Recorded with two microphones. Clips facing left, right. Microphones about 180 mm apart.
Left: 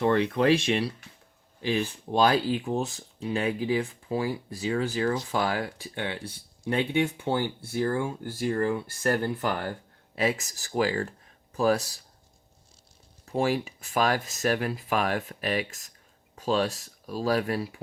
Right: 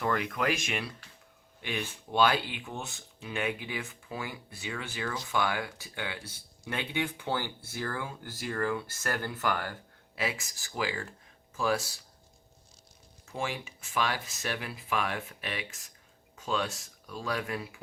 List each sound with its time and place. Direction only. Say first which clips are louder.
0.0 s speech: left 7 dB; 30° left (ahead or behind)
13.2 s speech: left 9 dB; 35° left (ahead or behind)